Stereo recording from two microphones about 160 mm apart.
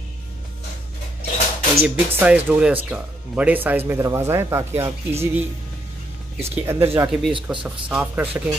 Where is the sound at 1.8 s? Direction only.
10° right (ahead or behind).